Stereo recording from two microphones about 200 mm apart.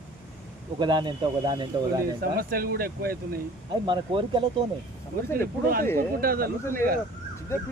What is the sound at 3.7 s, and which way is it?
Speech, 25° right (ahead or behind).